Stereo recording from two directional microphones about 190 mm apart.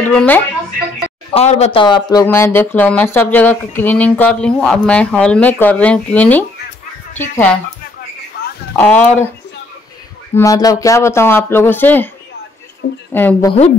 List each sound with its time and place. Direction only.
0.0 s a sound: 5° left (ahead or behind)
1.3 s a man's voice: 35° left (ahead or behind)
2.2 s speech: 10° left (ahead or behind)
8.7 s speech: 10° left (ahead or behind)
10.3 s speech: 15° left (ahead or behind)
13.1 s speech: 10° left (ahead or behind)